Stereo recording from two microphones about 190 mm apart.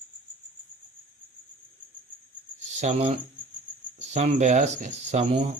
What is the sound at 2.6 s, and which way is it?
Cricket, 40° right (ahead or behind).